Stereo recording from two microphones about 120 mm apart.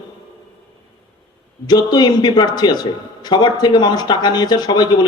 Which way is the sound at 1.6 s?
35° left (ahead or behind).